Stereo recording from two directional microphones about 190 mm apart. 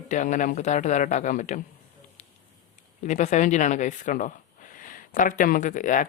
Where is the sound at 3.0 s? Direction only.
40° left (ahead or behind).